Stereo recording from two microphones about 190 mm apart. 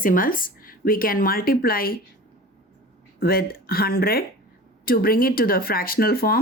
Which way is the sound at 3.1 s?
50° left (ahead or behind).